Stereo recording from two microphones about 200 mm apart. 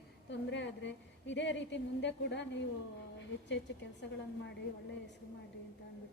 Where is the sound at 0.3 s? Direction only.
60° left (ahead or behind).